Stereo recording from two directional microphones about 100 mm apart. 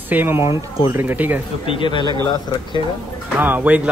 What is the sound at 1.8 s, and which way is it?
Speech, 55° left (ahead or behind).